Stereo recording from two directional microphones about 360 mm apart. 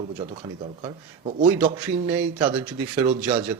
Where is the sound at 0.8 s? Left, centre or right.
Right.